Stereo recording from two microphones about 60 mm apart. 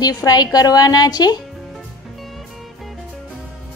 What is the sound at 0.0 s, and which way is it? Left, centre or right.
A woman's voice, left.